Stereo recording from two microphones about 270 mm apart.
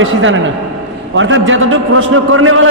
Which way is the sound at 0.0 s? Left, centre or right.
Right.